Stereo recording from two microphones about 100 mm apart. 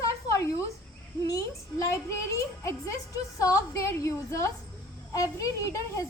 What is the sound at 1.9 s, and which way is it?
A child's voice, 30° left (ahead or behind).